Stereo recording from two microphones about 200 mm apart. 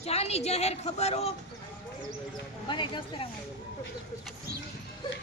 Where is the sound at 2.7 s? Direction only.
25° left (ahead or behind).